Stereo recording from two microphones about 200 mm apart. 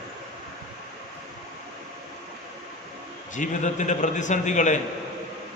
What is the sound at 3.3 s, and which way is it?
A man's voice, 40° left (ahead or behind).